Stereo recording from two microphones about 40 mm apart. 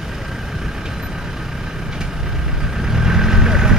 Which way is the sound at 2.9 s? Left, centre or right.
Centre.